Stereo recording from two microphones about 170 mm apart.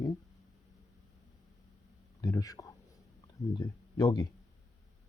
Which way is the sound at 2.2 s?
20° left (ahead or behind).